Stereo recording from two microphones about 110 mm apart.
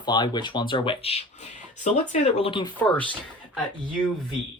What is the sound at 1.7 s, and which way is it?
Speech, 90° left.